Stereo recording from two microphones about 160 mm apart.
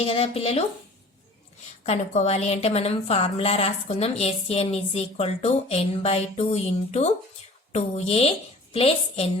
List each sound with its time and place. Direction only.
0.0 s a woman's voice: 35° left (ahead or behind)
1.8 s a woman's voice: 45° left (ahead or behind)